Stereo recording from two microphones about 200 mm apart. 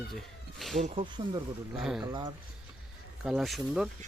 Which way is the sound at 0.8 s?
30° right (ahead or behind).